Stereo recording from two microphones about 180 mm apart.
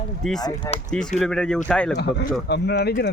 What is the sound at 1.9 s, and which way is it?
Speech, 60° left (ahead or behind).